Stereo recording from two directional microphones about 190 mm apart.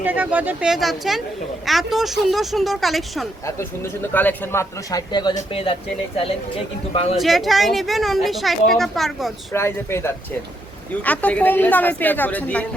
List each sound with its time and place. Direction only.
0.0 s a woman's voice: 10° right (ahead or behind); by 4.6 s 10° left (ahead or behind)
4.9 s speech: 20° left (ahead or behind)
6.9 s speech: 30° left (ahead or behind)
7.2 s speech: centre (ahead or behind)
9.5 s a woman's voice: 15° left (ahead or behind)